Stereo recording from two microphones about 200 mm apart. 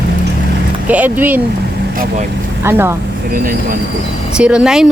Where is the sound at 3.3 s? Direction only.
45° right (ahead or behind).